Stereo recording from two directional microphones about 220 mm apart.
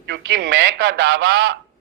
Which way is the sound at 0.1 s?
50° right (ahead or behind).